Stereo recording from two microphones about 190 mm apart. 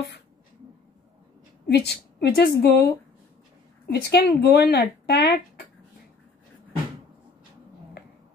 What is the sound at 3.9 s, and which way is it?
A woman's voice, 55° left (ahead or behind).